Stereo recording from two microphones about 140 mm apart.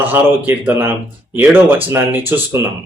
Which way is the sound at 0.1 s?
15° right (ahead or behind).